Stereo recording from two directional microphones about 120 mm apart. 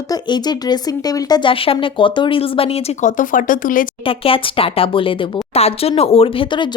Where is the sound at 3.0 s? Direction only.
90° left.